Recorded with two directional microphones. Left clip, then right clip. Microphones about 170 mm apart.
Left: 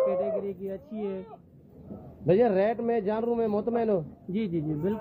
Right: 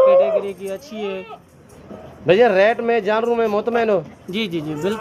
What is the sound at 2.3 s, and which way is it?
Speech, 10° left (ahead or behind).